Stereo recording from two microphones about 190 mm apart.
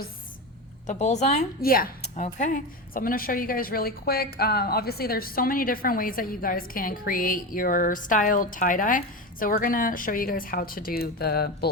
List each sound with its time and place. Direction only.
0.9 s a woman's voice: 40° left (ahead or behind)
1.6 s speech: 50° left (ahead or behind)
2.0 s speech: 40° left (ahead or behind); by 11.7 s 55° left (ahead or behind)